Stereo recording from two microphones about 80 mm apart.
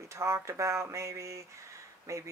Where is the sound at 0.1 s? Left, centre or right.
Right.